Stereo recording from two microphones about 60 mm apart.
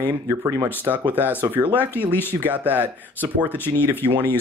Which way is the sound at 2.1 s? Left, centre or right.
Left.